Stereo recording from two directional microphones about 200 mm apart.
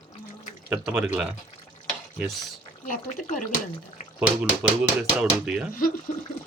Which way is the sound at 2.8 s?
40° left (ahead or behind).